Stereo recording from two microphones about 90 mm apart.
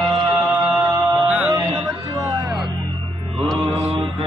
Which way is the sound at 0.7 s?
25° right (ahead or behind).